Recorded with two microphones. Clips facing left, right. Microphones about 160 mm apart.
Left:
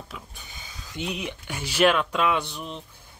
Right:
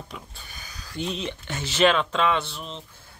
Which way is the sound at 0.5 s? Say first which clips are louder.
Even; 25° left (ahead or behind).